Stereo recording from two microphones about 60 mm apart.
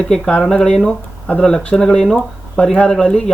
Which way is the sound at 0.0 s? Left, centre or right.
Centre.